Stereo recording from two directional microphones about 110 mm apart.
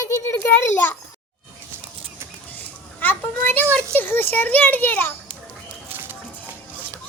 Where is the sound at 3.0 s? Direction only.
15° left (ahead or behind).